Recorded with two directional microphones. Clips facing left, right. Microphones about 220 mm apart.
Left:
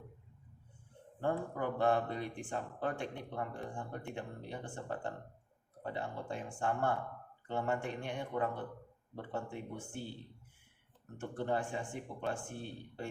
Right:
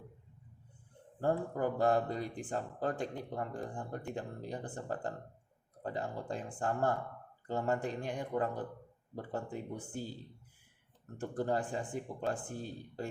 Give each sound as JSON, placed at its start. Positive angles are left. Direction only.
{"t": 1.2, "sound": "speech", "side_deg": -40}
{"t": 11.2, "sound": "speech", "side_deg": -35}